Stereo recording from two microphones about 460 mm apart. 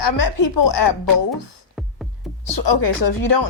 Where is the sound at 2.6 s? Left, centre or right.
Left.